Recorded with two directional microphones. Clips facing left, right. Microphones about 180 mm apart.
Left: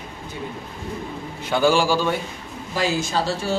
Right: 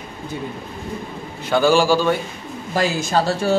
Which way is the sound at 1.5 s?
15° left (ahead or behind).